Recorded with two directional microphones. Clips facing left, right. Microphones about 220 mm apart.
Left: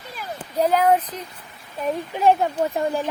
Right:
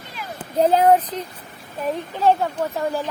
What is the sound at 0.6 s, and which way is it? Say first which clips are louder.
Speech: right 3 dB; 30° right (ahead or behind).